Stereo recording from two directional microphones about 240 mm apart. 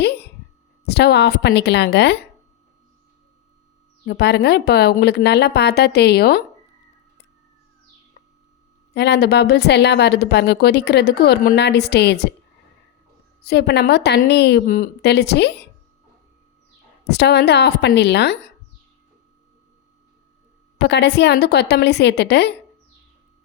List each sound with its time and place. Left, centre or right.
0.9 s a woman's voice: left
4.0 s a woman's voice: left
8.9 s a woman's voice: left
13.4 s a woman's voice: left
17.1 s a woman's voice: left
20.7 s a woman's voice: left